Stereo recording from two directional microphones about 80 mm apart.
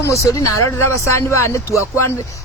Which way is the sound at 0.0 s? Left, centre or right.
Left.